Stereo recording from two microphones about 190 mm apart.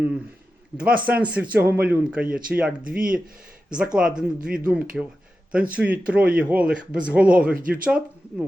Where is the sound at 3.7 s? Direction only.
5° right (ahead or behind).